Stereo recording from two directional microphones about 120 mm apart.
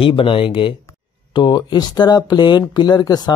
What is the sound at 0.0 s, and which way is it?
Speech, 45° left (ahead or behind).